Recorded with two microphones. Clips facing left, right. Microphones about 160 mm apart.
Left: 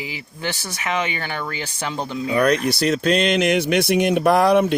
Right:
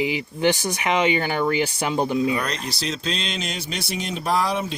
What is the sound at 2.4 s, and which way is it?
Speech, 60° left (ahead or behind).